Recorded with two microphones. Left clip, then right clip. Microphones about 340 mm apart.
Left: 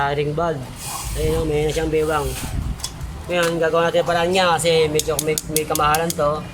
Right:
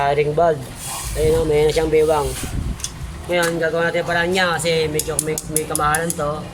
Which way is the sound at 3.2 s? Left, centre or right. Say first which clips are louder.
Even; centre.